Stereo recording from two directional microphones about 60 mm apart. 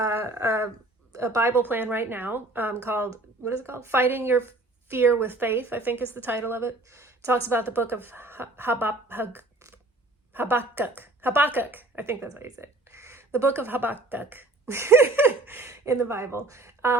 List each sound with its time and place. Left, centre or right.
0.0 s a sound: right
1.1 s speech: right
1.6 s speech: right
10.3 s speech: right
15.7 s speech: right